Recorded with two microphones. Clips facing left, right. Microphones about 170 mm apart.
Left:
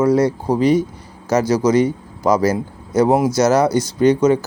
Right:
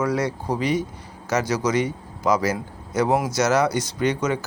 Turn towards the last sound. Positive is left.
turn(degrees=35)  # may be behind; listen again after turning